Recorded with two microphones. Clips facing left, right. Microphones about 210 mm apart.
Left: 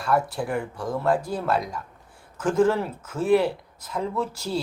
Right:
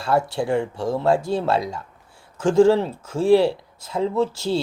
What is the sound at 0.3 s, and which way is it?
Speech, 25° right (ahead or behind).